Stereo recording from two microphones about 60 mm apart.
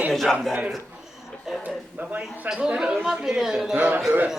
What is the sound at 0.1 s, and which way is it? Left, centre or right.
Speech, centre.